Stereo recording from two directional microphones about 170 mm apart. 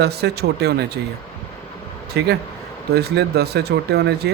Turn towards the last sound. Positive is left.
turn(degrees=-70)  # may be behind; listen again after turning